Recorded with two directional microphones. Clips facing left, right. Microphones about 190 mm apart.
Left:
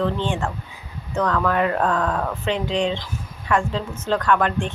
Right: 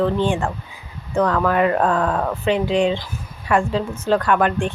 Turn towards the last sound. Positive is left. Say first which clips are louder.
# right 2 dB
turn(degrees=-10)  # may be behind; listen again after turning